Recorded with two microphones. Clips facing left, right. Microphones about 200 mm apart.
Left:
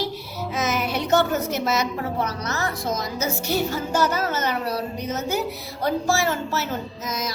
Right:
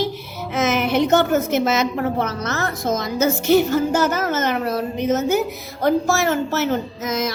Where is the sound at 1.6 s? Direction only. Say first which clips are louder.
Right 5 dB; 55° right (ahead or behind).